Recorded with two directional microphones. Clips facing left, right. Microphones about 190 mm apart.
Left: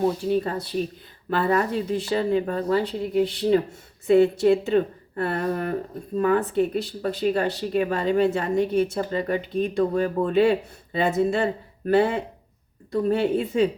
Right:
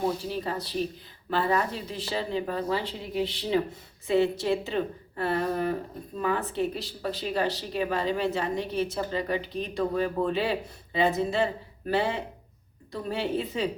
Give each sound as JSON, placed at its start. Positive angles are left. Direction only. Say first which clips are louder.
{"t": 1.3, "sound": "speech", "louder": "left 4 dB", "side_deg": 50}